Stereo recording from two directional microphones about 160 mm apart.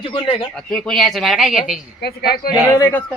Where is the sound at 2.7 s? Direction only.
15° left (ahead or behind).